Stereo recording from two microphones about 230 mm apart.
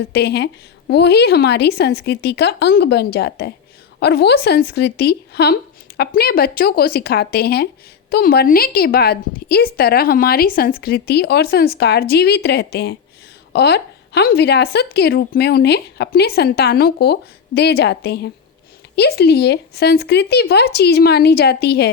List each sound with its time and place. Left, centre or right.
0.1 s a woman's voice: left